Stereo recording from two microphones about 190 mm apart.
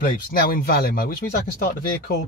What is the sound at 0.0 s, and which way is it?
Speech, 50° left (ahead or behind).